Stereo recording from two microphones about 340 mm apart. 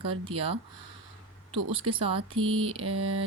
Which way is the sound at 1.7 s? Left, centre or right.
Centre.